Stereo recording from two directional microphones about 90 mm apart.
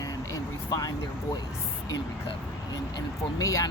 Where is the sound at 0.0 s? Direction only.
40° left (ahead or behind).